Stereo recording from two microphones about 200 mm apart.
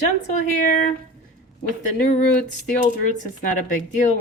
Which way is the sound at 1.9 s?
40° left (ahead or behind).